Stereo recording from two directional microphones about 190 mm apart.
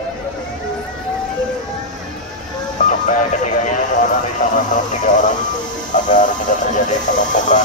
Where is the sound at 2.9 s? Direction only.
40° left (ahead or behind).